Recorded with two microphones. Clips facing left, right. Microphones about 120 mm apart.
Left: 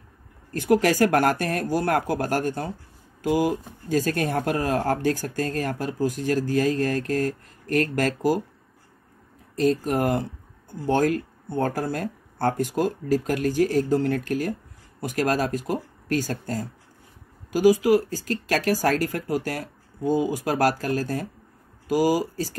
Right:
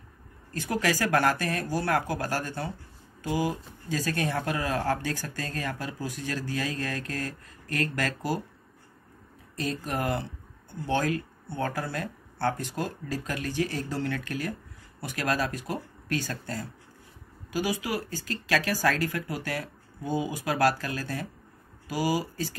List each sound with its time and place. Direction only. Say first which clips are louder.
0.5 s speech: left 8 dB; 50° left (ahead or behind)
9.6 s speech: left 9 dB; 45° left (ahead or behind)